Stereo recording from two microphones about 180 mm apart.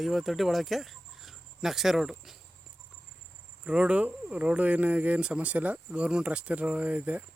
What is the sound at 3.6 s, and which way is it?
Speech, 5° right (ahead or behind).